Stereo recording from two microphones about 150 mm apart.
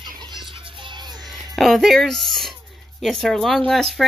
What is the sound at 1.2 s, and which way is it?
Speech, centre (ahead or behind).